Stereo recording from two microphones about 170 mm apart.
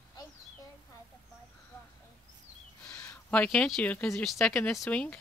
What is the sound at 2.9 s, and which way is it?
Speech, 10° left (ahead or behind).